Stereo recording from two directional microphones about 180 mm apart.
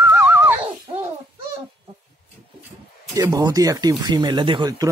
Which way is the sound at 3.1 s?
20° right (ahead or behind).